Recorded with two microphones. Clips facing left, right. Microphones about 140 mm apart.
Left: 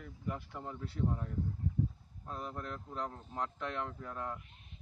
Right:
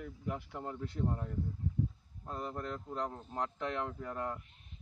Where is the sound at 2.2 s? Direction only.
10° right (ahead or behind).